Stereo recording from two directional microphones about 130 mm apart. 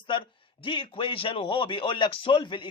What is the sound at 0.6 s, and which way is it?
Speech, 40° left (ahead or behind).